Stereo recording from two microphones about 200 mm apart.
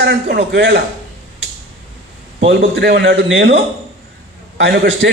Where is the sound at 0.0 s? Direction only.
60° right (ahead or behind).